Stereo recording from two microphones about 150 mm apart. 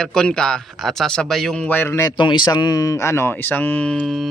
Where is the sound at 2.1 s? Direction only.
30° left (ahead or behind); by 4.3 s centre (ahead or behind).